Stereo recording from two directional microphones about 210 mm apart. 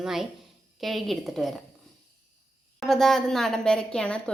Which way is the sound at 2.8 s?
Centre (ahead or behind).